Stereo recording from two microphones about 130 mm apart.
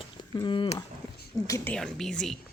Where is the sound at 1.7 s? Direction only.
5° left (ahead or behind).